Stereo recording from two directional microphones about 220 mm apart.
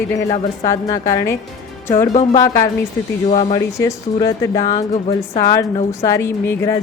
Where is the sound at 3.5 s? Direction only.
15° left (ahead or behind).